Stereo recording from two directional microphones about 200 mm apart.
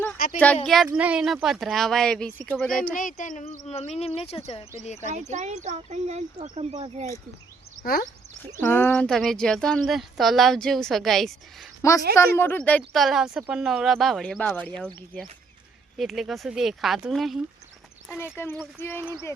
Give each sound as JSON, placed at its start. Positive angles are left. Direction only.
{"t": 0.3, "sound": "speech", "side_deg": 5}
{"t": 0.9, "sound": "speech", "side_deg": -5}
{"t": 3.0, "sound": "speech", "side_deg": 40}
{"t": 5.0, "sound": "speech", "side_deg": -35}
{"t": 7.8, "sound": "speech", "side_deg": 45}
{"t": 8.6, "sound": "speech", "side_deg": 10}
{"t": 11.8, "sound": "a woman's voice", "side_deg": 15}
{"t": 18.2, "sound": "speech", "side_deg": 10}